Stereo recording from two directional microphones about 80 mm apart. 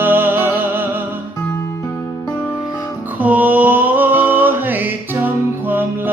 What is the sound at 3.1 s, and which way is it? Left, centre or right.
Music, centre.